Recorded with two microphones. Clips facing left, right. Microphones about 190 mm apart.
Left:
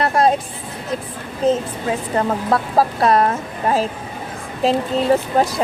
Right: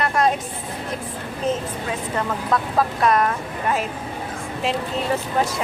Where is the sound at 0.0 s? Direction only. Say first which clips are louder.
Left 4 dB; 35° left (ahead or behind).